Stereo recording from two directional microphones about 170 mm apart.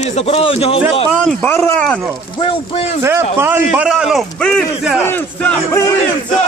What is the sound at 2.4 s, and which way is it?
Speech, 35° left (ahead or behind).